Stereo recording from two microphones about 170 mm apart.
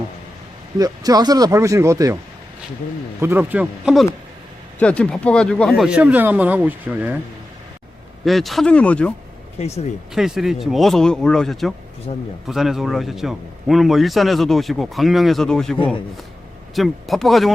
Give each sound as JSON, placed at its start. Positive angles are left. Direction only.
{"t": 0.8, "sound": "speech", "side_deg": -20}
{"t": 3.2, "sound": "a man's voice", "side_deg": -15}
{"t": 4.8, "sound": "a man's voice", "side_deg": 5}
{"t": 8.2, "sound": "a man's voice", "side_deg": 0}
{"t": 9.6, "sound": "speech", "side_deg": 40}
{"t": 10.2, "sound": "a man's voice", "side_deg": 0}
{"t": 12.1, "sound": "speech", "side_deg": 40}
{"t": 12.5, "sound": "a man's voice", "side_deg": 0}